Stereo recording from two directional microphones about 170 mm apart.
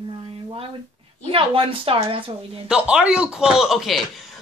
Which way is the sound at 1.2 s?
30° right (ahead or behind).